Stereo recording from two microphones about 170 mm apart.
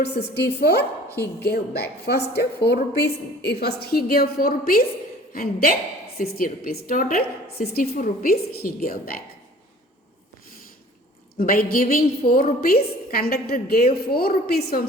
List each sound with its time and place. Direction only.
0.0 s a woman's voice: 75° left (ahead or behind)
11.3 s a woman's voice: 60° left (ahead or behind)